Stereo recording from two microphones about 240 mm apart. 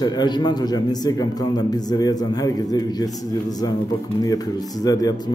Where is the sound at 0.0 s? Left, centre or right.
Centre.